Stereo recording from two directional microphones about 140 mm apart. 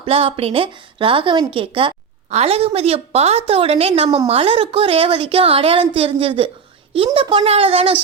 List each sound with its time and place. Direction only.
0.0 s a woman's voice: 40° right (ahead or behind)